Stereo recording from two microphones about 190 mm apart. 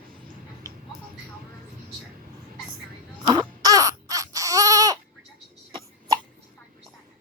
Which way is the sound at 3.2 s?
20° right (ahead or behind).